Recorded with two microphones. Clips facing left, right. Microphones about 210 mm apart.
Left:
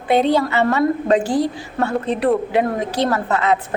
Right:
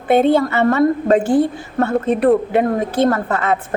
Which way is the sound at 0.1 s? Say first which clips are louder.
Right 3 dB; 50° right (ahead or behind).